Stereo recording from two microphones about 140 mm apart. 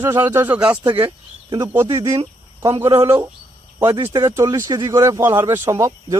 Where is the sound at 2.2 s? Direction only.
35° right (ahead or behind).